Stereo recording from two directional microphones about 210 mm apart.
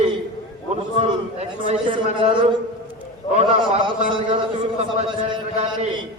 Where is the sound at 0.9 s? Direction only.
30° right (ahead or behind).